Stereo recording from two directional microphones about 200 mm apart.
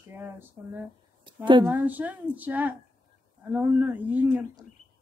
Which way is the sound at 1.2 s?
25° right (ahead or behind).